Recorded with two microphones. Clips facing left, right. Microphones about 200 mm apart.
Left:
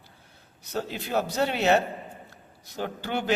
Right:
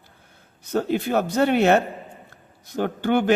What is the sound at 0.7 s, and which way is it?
A man's voice, 55° right (ahead or behind).